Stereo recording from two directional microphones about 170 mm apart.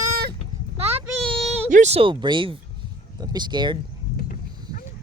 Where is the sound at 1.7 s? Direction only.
40° right (ahead or behind).